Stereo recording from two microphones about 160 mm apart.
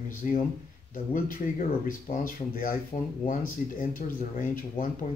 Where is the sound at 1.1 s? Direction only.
60° left (ahead or behind).